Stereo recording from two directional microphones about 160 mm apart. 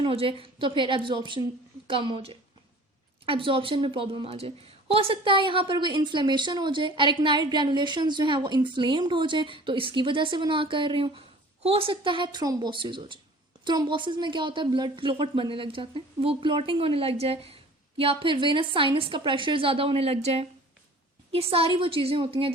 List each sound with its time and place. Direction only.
0.0 s a woman's voice: 35° right (ahead or behind)